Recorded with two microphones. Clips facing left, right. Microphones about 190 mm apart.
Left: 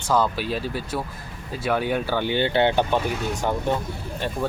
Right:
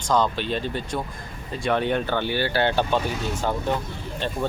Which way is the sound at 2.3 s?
20° left (ahead or behind).